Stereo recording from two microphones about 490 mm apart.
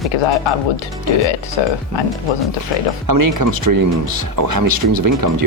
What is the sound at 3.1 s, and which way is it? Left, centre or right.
Speech, right.